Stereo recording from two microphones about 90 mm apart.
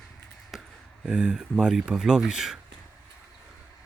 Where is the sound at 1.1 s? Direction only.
10° right (ahead or behind).